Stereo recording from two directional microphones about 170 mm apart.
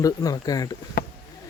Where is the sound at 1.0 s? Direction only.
60° left (ahead or behind).